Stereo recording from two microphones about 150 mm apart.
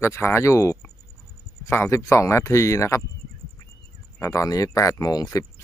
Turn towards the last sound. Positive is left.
turn(degrees=25)  # may be behind; listen again after turning